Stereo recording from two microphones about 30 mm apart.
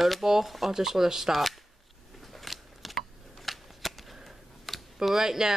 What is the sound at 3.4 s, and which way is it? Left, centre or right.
Shuffling cards, centre.